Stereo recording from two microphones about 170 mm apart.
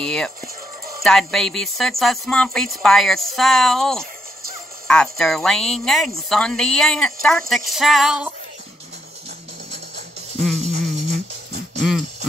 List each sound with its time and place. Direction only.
0.0 s speech: 5° left (ahead or behind)
10.3 s music: 40° right (ahead or behind)
11.8 s a sound: centre (ahead or behind)